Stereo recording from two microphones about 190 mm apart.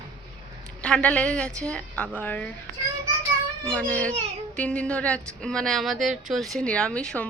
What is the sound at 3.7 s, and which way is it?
A child's voice, 5° left (ahead or behind).